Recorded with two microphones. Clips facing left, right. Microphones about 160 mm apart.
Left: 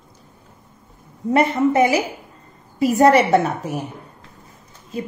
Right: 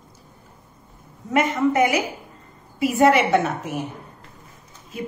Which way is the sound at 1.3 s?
35° left (ahead or behind).